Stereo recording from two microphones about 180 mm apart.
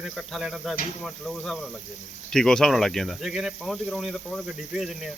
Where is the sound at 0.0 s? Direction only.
Centre (ahead or behind).